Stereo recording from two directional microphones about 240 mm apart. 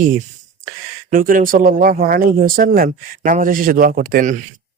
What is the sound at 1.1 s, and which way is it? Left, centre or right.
Speech, right.